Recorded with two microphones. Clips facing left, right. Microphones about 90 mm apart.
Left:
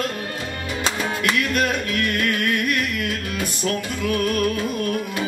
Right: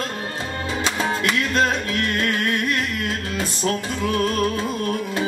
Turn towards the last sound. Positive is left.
turn(degrees=-25)  # may be behind; listen again after turning